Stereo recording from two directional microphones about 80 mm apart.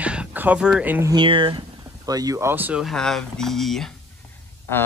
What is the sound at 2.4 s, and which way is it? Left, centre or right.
Speech, right.